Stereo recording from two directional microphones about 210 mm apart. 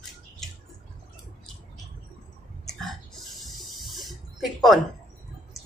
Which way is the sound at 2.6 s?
Centre (ahead or behind).